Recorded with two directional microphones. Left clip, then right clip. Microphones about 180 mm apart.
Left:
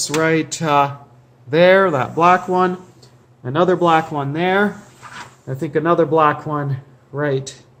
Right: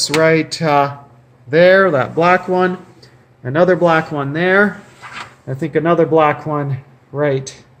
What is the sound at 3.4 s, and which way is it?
Speech, 30° right (ahead or behind).